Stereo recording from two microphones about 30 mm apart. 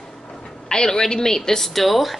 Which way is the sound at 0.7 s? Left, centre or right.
Left.